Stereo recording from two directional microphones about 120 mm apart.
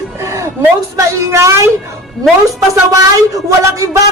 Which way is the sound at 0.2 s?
25° right (ahead or behind).